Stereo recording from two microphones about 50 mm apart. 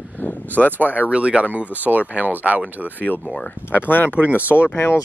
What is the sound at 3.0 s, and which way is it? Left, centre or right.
Speech, left.